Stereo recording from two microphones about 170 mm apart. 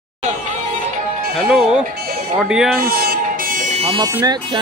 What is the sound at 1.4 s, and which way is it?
Speech, 5° right (ahead or behind).